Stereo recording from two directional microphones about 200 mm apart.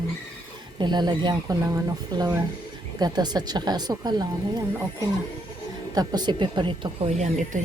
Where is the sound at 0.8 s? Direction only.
20° right (ahead or behind).